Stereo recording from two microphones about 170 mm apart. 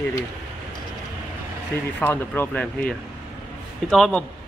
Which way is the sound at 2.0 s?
10° left (ahead or behind).